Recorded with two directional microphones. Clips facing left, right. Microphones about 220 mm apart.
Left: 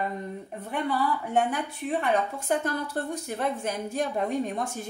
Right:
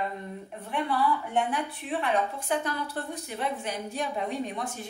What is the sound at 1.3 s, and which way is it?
A woman's voice, 40° left (ahead or behind).